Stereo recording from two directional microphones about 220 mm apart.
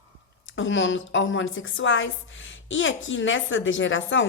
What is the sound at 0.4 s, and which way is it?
A woman's voice, 60° left (ahead or behind).